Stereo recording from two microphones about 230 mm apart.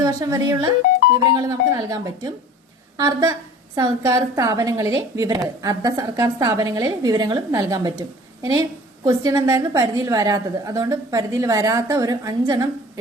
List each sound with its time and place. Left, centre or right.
0.0 s a woman's voice: centre